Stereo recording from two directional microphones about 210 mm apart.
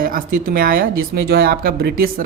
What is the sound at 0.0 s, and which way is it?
Speech, 45° right (ahead or behind).